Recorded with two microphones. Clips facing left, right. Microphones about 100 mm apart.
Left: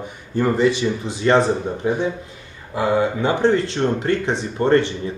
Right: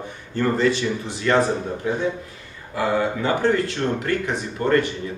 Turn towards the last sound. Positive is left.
turn(degrees=25)  # may be behind; listen again after turning